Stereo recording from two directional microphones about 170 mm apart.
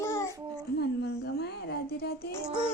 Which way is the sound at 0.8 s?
75° left (ahead or behind).